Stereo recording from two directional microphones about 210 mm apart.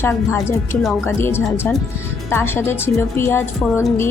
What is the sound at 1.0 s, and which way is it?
A woman's voice, 10° left (ahead or behind).